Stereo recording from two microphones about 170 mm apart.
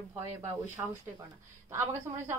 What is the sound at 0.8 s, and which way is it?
Speech, 20° right (ahead or behind).